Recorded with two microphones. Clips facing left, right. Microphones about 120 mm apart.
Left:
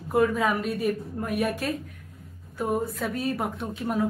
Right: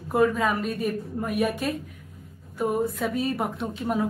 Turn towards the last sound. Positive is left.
turn(degrees=0)  # may be behind; listen again after turning